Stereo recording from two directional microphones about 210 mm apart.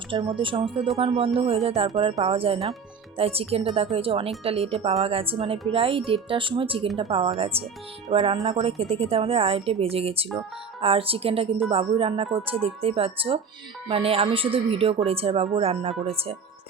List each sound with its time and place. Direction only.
0.3 s speech: 25° right (ahead or behind)